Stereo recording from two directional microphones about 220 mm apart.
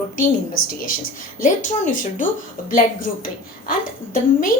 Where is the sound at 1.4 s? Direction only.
35° left (ahead or behind).